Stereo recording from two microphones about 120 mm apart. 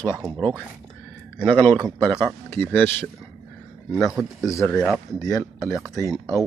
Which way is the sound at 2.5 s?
15° left (ahead or behind).